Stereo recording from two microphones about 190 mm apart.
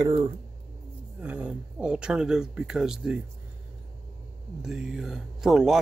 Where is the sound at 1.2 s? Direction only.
5° right (ahead or behind).